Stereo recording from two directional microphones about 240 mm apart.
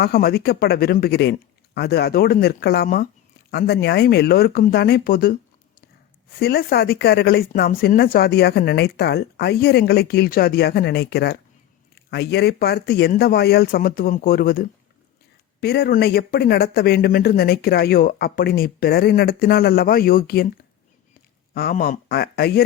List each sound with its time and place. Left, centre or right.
0.0 s speech: left
6.4 s speech: left
21.5 s speech: left